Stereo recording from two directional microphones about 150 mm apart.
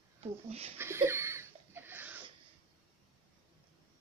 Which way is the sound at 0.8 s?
15° right (ahead or behind).